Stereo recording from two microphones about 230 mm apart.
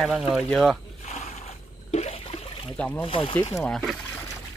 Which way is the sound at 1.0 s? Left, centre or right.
Left.